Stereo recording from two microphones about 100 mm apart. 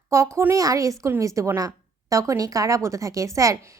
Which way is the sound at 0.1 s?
30° right (ahead or behind).